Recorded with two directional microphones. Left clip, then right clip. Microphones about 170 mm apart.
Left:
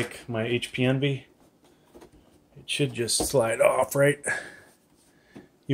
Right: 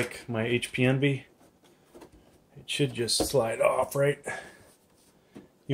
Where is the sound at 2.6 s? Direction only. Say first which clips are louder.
Left 2 dB; 5° left (ahead or behind); by 4.4 s 40° left (ahead or behind).